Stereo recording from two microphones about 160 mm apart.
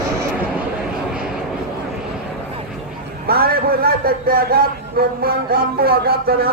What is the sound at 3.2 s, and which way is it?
A man's voice, 70° right (ahead or behind).